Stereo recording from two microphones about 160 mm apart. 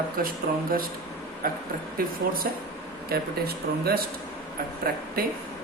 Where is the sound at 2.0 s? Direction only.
65° right (ahead or behind).